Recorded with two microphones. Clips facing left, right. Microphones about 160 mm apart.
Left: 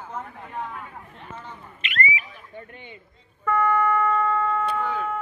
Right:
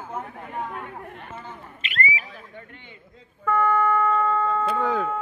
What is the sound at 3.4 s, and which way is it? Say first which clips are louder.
Speech: even; 10° right (ahead or behind).